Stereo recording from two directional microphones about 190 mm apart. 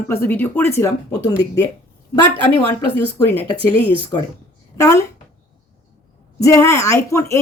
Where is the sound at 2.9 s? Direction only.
10° left (ahead or behind).